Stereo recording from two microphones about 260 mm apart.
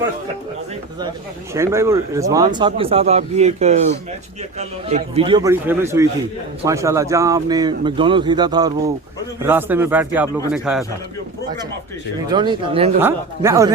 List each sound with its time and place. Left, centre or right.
1.5 s a man's voice: centre
12.3 s a man's voice: centre
13.0 s a man's voice: centre